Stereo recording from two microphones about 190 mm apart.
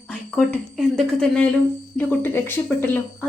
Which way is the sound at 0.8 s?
Centre (ahead or behind).